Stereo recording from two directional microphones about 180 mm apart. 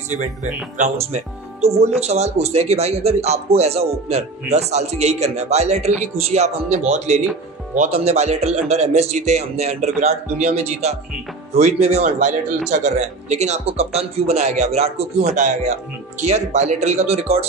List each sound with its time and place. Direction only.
0.1 s a man's voice: 40° right (ahead or behind)
15.2 s a man's voice: 45° right (ahead or behind)